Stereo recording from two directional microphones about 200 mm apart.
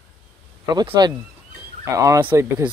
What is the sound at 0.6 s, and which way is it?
Speech, 20° right (ahead or behind).